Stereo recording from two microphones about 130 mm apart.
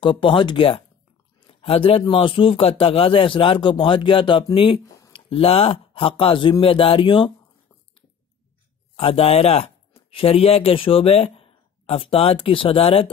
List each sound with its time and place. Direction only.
0.0 s a man's voice: 40° left (ahead or behind)
4.8 s a sound: 25° left (ahead or behind)
5.1 s a man's voice: 45° left (ahead or behind)
8.9 s speech: 45° left (ahead or behind)